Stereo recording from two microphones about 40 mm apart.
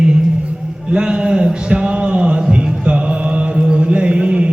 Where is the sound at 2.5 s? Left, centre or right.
Right.